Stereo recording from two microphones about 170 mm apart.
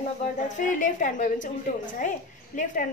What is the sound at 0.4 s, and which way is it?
A woman's voice, 50° left (ahead or behind).